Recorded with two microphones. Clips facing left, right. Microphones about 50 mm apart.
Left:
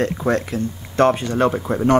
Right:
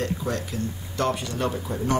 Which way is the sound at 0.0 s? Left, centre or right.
Left.